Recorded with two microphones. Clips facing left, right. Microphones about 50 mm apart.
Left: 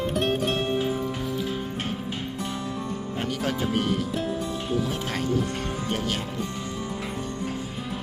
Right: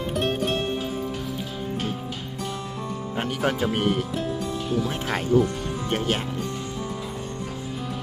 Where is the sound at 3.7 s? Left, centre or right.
Right.